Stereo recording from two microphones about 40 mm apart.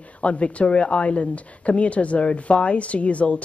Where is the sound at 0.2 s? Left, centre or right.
Left.